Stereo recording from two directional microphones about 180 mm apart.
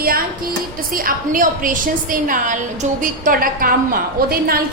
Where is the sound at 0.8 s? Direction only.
50° right (ahead or behind).